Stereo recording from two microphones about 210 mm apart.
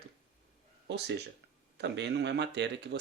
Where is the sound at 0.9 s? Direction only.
55° right (ahead or behind).